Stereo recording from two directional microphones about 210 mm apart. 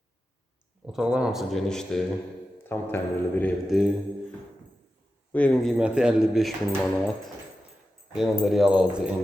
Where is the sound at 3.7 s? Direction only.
Centre (ahead or behind).